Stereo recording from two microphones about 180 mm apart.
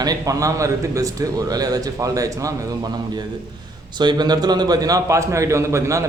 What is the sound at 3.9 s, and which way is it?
A man's voice, 25° right (ahead or behind).